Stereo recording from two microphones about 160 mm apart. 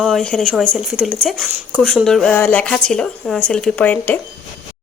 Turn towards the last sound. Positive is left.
turn(degrees=10)  # may be behind; listen again after turning